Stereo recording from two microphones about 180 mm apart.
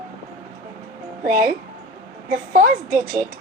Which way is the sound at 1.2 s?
50° right (ahead or behind).